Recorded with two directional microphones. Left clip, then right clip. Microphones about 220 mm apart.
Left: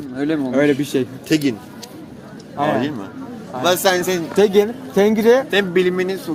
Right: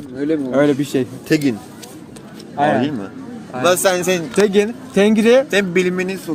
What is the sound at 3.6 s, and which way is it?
Speech, 45° right (ahead or behind).